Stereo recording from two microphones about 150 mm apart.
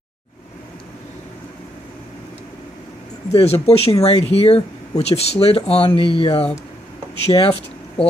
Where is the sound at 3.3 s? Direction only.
40° left (ahead or behind).